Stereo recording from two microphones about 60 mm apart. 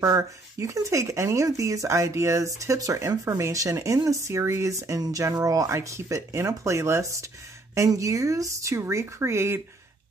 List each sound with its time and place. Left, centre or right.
0.0 s speech: right
5.9 s speech: right